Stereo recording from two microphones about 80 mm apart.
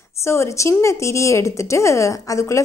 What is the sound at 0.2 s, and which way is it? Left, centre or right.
Speech, left.